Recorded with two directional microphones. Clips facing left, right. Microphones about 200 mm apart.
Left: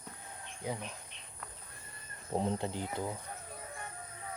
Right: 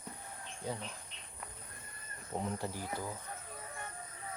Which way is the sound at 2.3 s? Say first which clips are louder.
Left 5 dB; 30° left (ahead or behind).